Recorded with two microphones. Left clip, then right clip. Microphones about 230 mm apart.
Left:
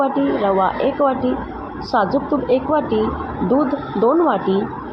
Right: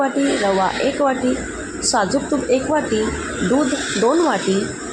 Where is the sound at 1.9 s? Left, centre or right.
Right.